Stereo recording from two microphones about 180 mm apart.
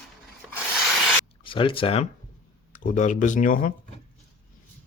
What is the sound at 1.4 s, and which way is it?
Speech, 30° left (ahead or behind).